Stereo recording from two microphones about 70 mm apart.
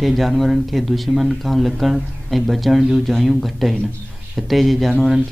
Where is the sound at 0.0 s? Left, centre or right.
Centre.